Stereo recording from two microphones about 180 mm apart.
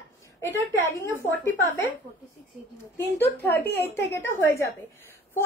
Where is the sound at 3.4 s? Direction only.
10° left (ahead or behind).